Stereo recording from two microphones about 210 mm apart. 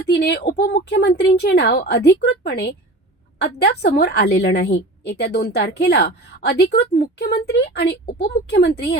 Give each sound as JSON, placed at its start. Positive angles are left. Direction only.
{"t": 0.1, "sound": "a woman's voice", "side_deg": 50}